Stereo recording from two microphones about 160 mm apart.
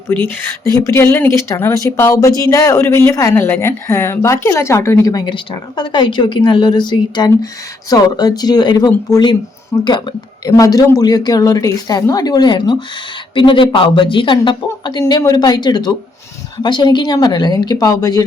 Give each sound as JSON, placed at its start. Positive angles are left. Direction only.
{"t": 0.1, "sound": "speech", "side_deg": 10}